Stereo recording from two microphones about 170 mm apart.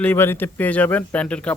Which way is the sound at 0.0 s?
10° left (ahead or behind).